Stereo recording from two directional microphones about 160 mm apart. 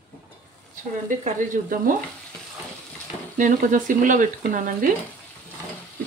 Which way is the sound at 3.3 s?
55° right (ahead or behind).